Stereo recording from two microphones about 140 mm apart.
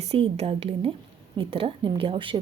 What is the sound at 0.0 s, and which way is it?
A woman's voice, 45° right (ahead or behind).